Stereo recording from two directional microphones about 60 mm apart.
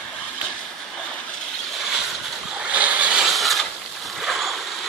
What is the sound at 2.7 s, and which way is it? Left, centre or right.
Vehicle, right.